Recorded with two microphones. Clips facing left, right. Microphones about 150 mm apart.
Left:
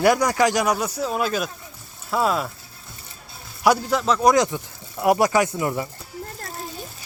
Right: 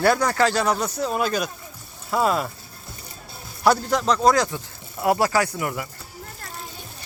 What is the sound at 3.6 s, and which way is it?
Speech, 5° left (ahead or behind).